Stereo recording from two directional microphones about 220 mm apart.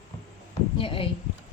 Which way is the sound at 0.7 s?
25° left (ahead or behind).